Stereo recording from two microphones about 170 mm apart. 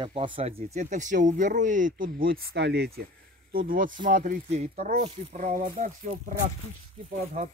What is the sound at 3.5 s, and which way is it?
Speech, 60° right (ahead or behind).